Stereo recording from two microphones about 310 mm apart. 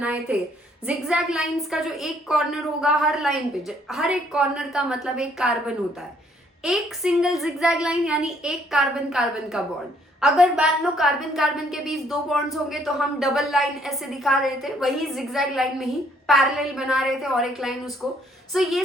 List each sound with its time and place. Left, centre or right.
0.0 s a woman's voice: centre